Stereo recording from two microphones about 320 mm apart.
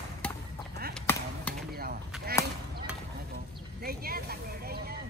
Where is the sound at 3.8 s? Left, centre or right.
Right.